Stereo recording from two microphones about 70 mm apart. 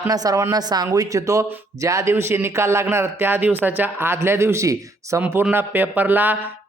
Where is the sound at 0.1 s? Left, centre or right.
Right.